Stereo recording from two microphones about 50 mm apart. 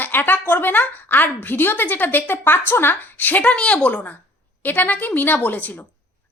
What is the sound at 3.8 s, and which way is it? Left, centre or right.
A woman's voice, left.